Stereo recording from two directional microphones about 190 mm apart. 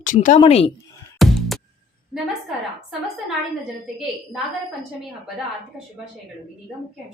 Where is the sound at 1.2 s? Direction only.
Centre (ahead or behind).